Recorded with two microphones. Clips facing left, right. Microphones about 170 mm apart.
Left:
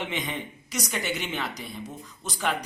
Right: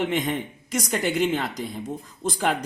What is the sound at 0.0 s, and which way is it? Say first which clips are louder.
A woman's voice: right 7 dB; 45° right (ahead or behind).